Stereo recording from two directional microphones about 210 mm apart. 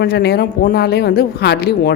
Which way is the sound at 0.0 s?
50° left (ahead or behind).